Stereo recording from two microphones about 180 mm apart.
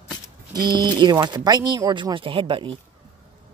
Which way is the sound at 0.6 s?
25° right (ahead or behind).